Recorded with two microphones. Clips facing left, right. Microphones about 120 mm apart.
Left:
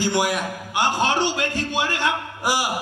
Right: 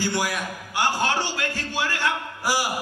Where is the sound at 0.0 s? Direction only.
20° left (ahead or behind).